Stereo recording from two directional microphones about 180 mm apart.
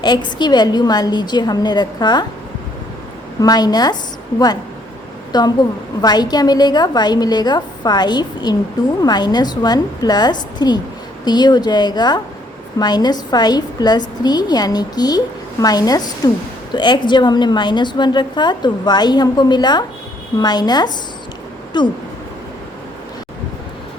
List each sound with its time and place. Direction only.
0.0 s a woman's voice: 25° left (ahead or behind)
3.4 s a woman's voice: 20° left (ahead or behind)
5.3 s a woman's voice: 25° left (ahead or behind)